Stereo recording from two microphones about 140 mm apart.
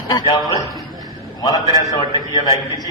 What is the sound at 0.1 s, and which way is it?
Speech, 30° left (ahead or behind).